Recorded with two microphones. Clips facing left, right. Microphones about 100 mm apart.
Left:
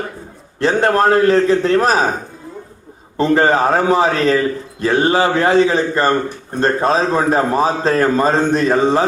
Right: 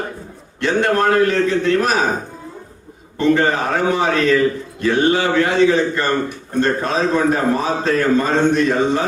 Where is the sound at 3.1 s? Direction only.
35° left (ahead or behind).